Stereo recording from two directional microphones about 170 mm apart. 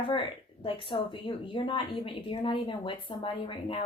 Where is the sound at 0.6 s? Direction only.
30° left (ahead or behind).